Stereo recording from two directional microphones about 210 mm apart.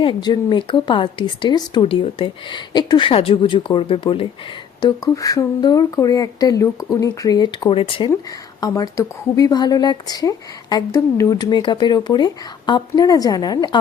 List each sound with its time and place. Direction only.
0.0 s speech: 20° left (ahead or behind)